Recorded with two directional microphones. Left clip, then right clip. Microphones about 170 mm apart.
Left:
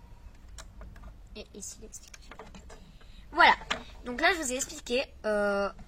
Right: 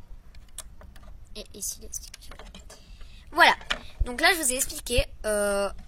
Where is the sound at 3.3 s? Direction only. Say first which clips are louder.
Right 2 dB; 40° right (ahead or behind).